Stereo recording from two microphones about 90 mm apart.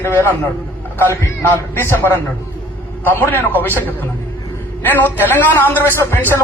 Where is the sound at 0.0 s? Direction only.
25° left (ahead or behind).